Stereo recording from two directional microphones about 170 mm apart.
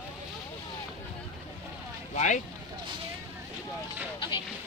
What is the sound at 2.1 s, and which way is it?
Speech, 45° left (ahead or behind).